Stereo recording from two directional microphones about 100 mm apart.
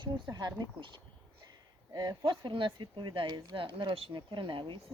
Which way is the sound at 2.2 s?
60° right (ahead or behind).